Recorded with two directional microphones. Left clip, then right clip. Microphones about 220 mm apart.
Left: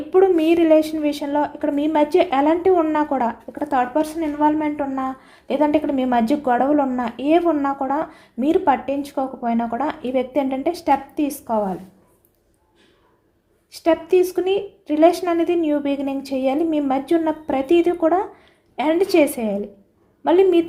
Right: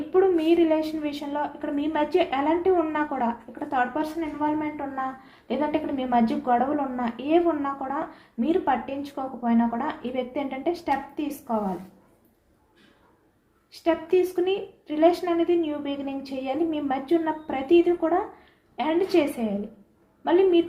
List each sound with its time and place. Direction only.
0.1 s speech: 50° left (ahead or behind)
13.7 s speech: 50° left (ahead or behind)